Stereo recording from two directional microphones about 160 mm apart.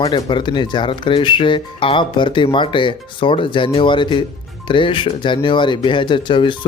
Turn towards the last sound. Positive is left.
turn(degrees=30)  # may be behind; listen again after turning